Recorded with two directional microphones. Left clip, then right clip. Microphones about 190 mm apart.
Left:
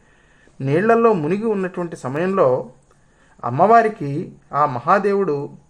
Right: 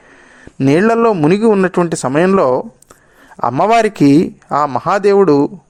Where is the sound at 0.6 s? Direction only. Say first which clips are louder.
Right 4 dB; 45° right (ahead or behind).